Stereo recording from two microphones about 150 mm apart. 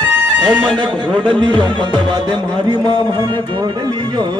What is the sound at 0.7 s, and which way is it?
Music, 30° right (ahead or behind).